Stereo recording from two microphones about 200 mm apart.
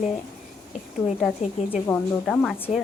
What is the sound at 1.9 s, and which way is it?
Speech, 5° left (ahead or behind).